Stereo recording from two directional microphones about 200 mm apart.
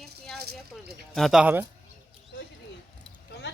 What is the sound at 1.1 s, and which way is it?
Speech, centre (ahead or behind).